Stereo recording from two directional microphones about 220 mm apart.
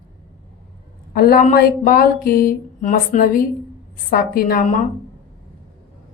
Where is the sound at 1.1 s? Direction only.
45° left (ahead or behind).